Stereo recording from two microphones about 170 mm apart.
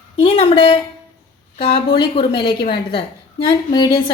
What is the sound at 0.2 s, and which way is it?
A woman's voice, 35° left (ahead or behind).